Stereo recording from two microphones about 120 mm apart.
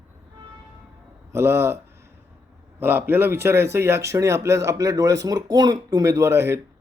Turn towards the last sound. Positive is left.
turn(degrees=-20)  # may be behind; listen again after turning